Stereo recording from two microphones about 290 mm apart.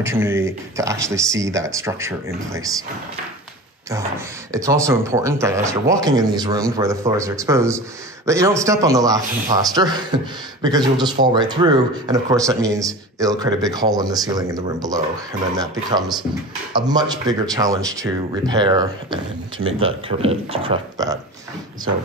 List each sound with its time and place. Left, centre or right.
0.0 s a man's voice: centre
4.5 s a man's voice: centre
16.0 s speech: centre
16.7 s a man's voice: centre